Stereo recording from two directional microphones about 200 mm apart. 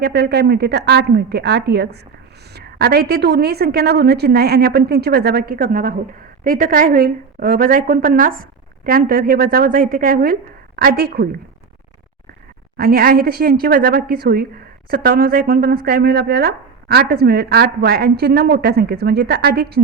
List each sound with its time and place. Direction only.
0.0 s a woman's voice: 50° right (ahead or behind)
12.7 s a woman's voice: 50° right (ahead or behind)